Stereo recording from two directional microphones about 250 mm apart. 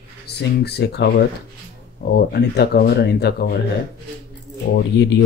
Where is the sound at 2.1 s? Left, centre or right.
Left.